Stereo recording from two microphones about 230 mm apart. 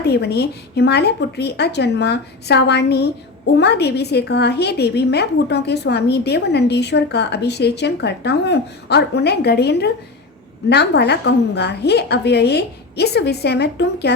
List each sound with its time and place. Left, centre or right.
0.0 s a woman's voice: left